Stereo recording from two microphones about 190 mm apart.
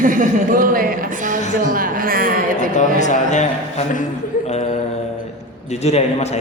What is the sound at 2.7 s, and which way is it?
Speech, 40° left (ahead or behind).